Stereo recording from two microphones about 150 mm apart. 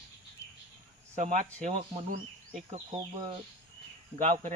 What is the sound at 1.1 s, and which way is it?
Speech, 55° right (ahead or behind).